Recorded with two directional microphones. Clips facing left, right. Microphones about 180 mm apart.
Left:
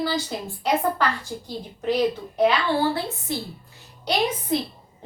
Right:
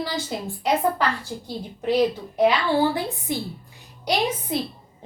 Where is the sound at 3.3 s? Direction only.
15° right (ahead or behind).